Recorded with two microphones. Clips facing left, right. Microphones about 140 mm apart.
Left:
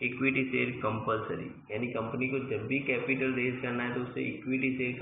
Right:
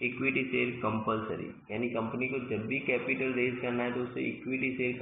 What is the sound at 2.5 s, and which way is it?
A man's voice, 25° right (ahead or behind).